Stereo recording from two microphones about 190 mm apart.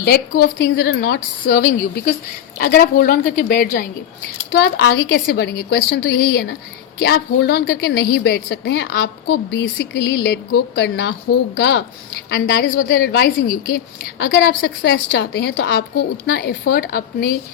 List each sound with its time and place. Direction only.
0.0 s a woman's voice: 55° left (ahead or behind)
4.6 s a woman's voice: 60° left (ahead or behind)
12.7 s a woman's voice: 55° left (ahead or behind)